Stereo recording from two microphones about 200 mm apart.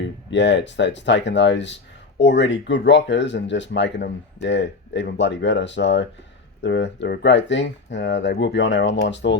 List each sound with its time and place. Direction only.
0.0 s speech: 60° left (ahead or behind)